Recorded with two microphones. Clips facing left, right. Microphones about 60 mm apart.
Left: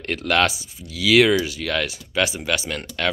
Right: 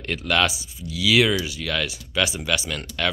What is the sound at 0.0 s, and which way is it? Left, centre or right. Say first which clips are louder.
Speech: left 2 dB; left.